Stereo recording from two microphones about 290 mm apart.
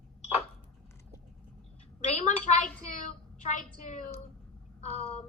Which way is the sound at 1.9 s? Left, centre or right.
Left.